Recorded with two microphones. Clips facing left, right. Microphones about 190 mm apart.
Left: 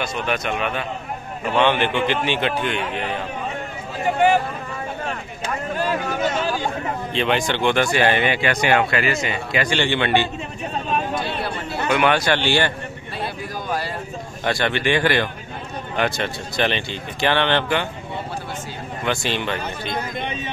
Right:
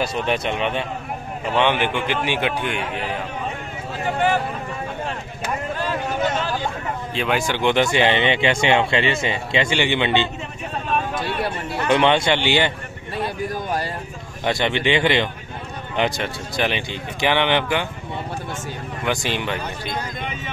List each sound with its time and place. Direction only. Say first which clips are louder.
0.0 s speech: right 2 dB; 30° right (ahead or behind)
1.6 s speech: left 2 dB; 15° right (ahead or behind)
7.2 s speech: left 1 dB; 5° right (ahead or behind); by 9.7 s 25° right (ahead or behind)
9.8 s speech: left 2 dB; 15° right (ahead or behind)
11.9 s speech: right 2 dB; 25° right (ahead or behind)
14.4 s speech: right 1 dB; 20° right (ahead or behind)
19.0 s speech: even; 15° right (ahead or behind)